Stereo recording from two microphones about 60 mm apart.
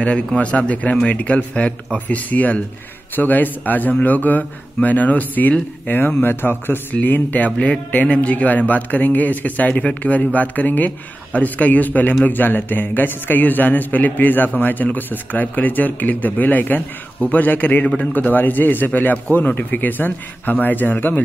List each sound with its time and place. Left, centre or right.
0.0 s a man's voice: centre